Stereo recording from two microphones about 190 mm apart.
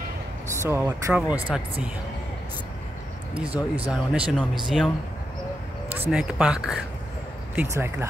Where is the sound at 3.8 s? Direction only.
5° right (ahead or behind).